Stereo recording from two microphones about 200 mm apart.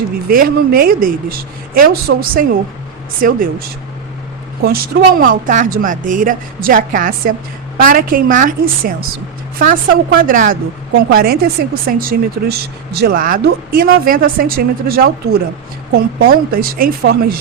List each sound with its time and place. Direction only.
0.3 s a woman's voice: 45° right (ahead or behind)
4.6 s a woman's voice: 50° right (ahead or behind)